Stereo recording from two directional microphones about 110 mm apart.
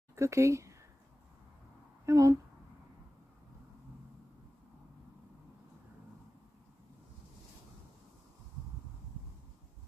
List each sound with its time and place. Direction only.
0.1 s speech: 25° right (ahead or behind)
2.0 s speech: 30° right (ahead or behind)